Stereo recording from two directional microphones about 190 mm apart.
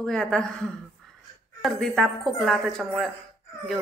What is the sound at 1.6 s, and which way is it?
A woman's voice, centre (ahead or behind).